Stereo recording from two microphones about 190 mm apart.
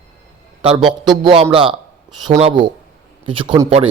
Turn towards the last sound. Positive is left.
turn(degrees=-35)  # may be behind; listen again after turning